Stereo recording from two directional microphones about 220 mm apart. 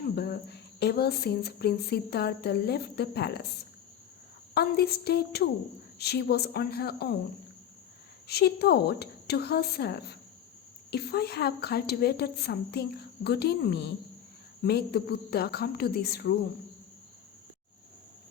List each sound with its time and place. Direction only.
0.2 s speech: 45° left (ahead or behind)
4.5 s speech: 45° left (ahead or behind)
8.3 s speech: 45° left (ahead or behind)